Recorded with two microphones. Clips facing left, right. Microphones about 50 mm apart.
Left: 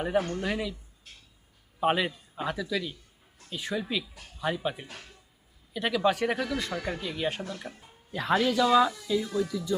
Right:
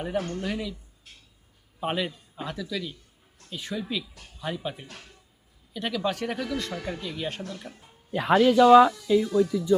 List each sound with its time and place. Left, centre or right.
0.0 s speech: centre
1.8 s speech: centre
8.3 s speech: centre
8.5 s speech: right
9.2 s speech: centre